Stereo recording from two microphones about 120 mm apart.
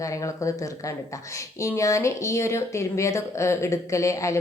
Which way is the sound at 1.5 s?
25° left (ahead or behind).